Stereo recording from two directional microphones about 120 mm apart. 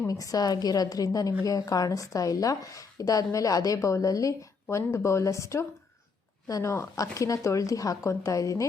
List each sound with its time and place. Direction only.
0.1 s a woman's voice: 30° left (ahead or behind)